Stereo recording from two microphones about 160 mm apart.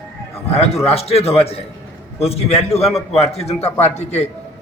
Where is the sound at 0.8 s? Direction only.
40° left (ahead or behind).